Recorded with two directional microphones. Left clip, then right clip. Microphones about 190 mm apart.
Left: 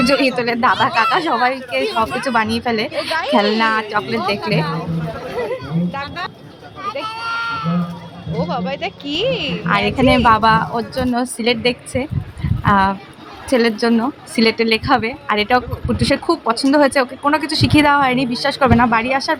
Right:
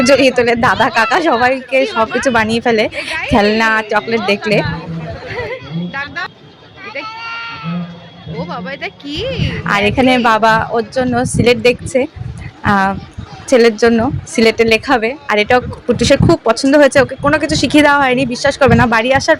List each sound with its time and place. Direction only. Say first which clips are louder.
0.0 s a woman's voice: right 6 dB; 15° right (ahead or behind)
5.3 s a sound: even; 15° right (ahead or behind)
6.8 s sheep: left 1 dB; 15° right (ahead or behind)
8.4 s a woman's voice: left 1 dB; 20° right (ahead or behind)